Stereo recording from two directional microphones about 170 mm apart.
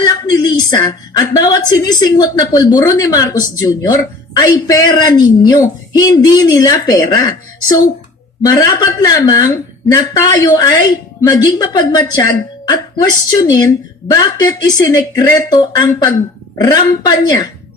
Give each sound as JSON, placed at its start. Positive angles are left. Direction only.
{"t": 0.0, "sound": "a woman's voice", "side_deg": 25}
{"t": 8.4, "sound": "a woman's voice", "side_deg": 20}